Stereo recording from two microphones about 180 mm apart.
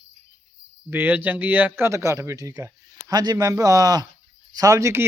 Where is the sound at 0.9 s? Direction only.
10° right (ahead or behind).